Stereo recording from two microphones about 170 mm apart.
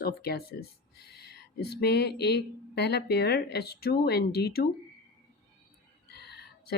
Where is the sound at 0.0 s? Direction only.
65° left (ahead or behind).